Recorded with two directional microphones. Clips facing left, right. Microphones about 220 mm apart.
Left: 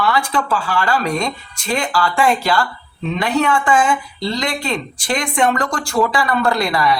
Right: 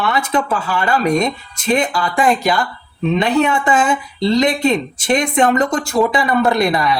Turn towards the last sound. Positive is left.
turn(degrees=-20)  # may be behind; listen again after turning